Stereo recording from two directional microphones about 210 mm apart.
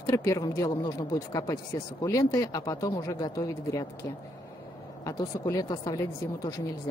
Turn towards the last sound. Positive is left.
turn(degrees=15)  # may be behind; listen again after turning